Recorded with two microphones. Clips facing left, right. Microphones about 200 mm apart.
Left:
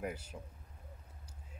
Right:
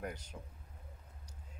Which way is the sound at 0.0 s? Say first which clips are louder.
Left 3 dB; 5° left (ahead or behind).